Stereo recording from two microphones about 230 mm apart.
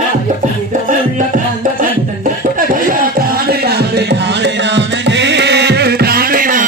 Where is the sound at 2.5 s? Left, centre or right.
Right.